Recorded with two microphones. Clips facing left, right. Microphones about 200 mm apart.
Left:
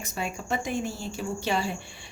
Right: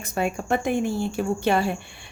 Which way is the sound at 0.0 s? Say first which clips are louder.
Right 7 dB; 55° right (ahead or behind).